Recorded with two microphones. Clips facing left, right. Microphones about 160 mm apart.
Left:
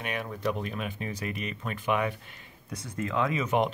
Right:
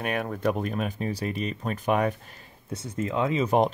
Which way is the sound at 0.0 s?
50° right (ahead or behind).